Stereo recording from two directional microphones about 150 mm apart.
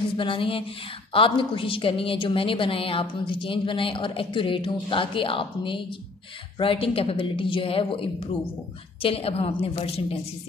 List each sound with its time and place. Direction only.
0.2 s a woman's voice: 35° left (ahead or behind)